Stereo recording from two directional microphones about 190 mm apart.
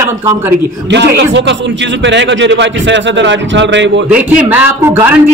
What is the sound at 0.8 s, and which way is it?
A man's voice, 65° right (ahead or behind).